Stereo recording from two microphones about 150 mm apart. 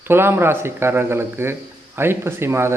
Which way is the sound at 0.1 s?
15° right (ahead or behind).